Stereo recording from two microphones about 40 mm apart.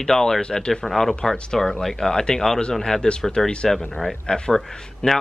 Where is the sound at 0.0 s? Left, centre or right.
Centre.